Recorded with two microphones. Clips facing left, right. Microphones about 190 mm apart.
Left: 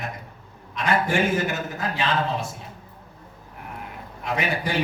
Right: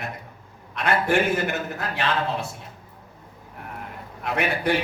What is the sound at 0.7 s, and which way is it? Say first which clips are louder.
A man's voice: right 1 dB; 60° right (ahead or behind).